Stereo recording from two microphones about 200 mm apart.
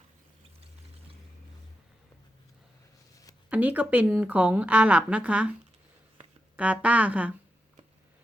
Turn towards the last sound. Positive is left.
turn(degrees=-5)  # may be behind; listen again after turning